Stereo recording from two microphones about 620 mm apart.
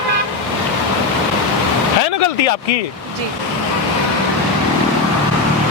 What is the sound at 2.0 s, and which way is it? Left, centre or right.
Speech, left.